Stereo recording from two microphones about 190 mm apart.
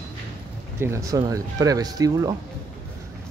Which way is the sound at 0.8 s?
15° right (ahead or behind).